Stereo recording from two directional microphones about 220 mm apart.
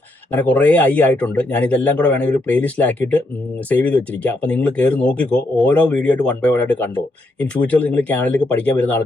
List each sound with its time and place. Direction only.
0.3 s speech: 5° left (ahead or behind)